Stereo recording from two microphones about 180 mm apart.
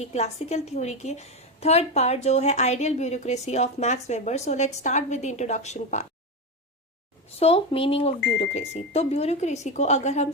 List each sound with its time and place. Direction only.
0.0 s a woman's voice: 35° left (ahead or behind)
7.3 s a woman's voice: 35° left (ahead or behind)